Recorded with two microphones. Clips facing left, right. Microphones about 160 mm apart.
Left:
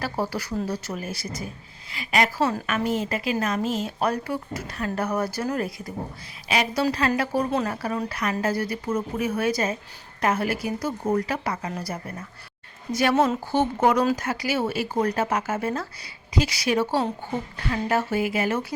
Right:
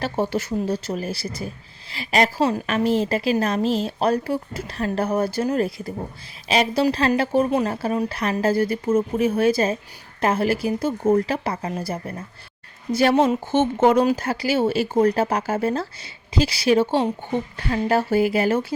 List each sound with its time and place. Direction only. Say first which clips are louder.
0.0 s a woman's voice: right 4 dB; 25° right (ahead or behind)
17.7 s speech: right 4 dB; 35° right (ahead or behind)